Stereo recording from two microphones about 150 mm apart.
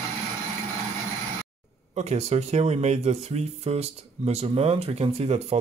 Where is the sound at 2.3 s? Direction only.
45° right (ahead or behind).